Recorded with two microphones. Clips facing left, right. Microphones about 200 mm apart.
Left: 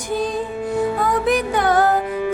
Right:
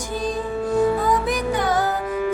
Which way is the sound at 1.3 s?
60° left (ahead or behind).